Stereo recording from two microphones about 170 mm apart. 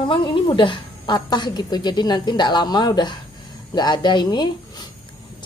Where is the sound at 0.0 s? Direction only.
30° left (ahead or behind).